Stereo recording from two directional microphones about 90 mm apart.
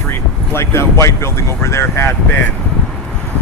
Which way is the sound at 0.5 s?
30° left (ahead or behind).